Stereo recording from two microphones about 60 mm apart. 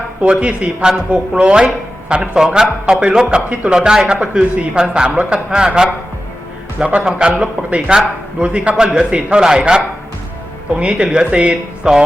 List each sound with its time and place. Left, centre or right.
0.2 s a man's voice: centre
7.0 s a man's voice: centre
7.3 s a man's voice: centre